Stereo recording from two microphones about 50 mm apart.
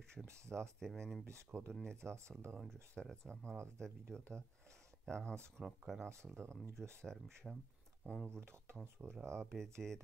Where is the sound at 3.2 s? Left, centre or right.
Left.